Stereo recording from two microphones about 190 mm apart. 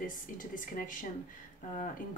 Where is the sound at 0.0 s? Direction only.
45° left (ahead or behind).